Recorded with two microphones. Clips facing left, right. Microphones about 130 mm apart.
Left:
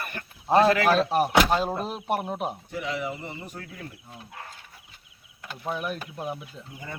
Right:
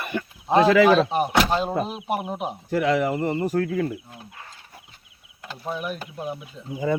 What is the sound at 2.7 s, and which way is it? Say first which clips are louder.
Speech: right 10 dB; 90° right.